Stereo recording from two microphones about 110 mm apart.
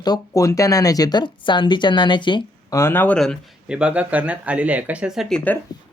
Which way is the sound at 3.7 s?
10° right (ahead or behind).